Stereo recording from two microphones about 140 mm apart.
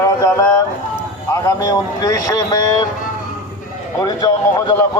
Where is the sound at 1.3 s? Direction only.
25° left (ahead or behind).